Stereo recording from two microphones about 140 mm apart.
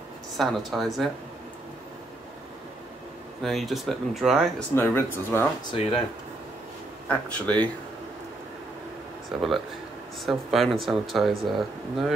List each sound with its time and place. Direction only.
0.4 s speech: centre (ahead or behind)
3.4 s speech: centre (ahead or behind)
4.7 s speech: 15° left (ahead or behind)
5.7 s speech: 45° left (ahead or behind)
7.1 s speech: 10° left (ahead or behind)
9.3 s speech: centre (ahead or behind)